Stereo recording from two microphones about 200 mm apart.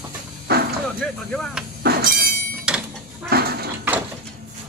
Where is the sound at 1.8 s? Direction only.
45° right (ahead or behind).